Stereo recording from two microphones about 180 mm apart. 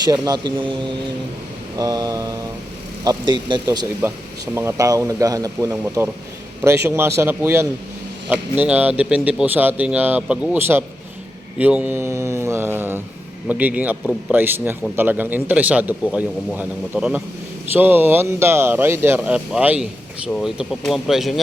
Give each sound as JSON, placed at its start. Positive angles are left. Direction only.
{"t": 0.1, "sound": "speech", "side_deg": -25}
{"t": 4.0, "sound": "a man's voice", "side_deg": -10}